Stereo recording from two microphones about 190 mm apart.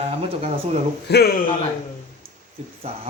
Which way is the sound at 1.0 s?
60° left (ahead or behind).